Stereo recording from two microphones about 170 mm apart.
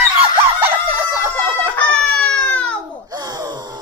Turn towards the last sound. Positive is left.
turn(degrees=-25)  # may be behind; listen again after turning